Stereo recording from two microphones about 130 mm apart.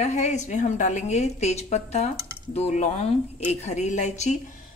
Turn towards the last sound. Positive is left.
turn(degrees=65)  # may be behind; listen again after turning